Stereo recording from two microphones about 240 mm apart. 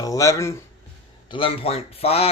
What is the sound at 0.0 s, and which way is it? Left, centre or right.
Speech, centre.